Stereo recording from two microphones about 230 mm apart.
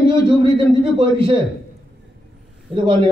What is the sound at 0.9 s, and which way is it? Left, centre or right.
Speech, right.